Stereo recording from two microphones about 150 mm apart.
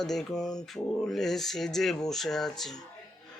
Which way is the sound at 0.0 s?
5° left (ahead or behind).